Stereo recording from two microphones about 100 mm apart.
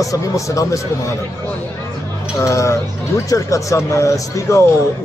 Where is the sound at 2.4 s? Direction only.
30° left (ahead or behind).